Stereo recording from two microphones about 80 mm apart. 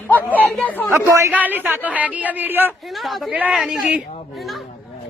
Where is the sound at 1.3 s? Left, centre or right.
Right.